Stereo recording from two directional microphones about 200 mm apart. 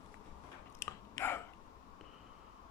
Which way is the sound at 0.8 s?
10° left (ahead or behind).